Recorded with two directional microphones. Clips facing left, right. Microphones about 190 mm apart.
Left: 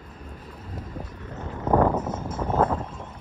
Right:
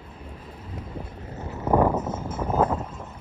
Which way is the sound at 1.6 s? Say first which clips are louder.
Even; 10° right (ahead or behind).